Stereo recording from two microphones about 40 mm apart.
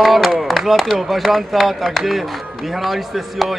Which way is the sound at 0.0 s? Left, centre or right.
Centre.